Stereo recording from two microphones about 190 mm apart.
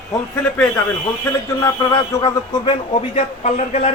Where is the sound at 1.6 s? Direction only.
15° left (ahead or behind).